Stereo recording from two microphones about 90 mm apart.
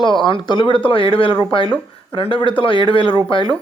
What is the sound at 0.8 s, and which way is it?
Speech, 75° left (ahead or behind).